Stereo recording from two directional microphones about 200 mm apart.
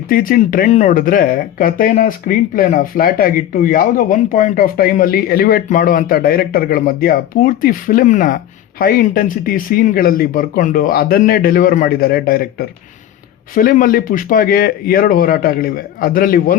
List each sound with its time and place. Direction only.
0.1 s speech: 45° left (ahead or behind)